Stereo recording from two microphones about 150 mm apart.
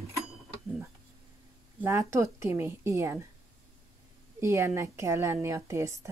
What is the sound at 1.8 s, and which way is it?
A woman's voice, 20° right (ahead or behind).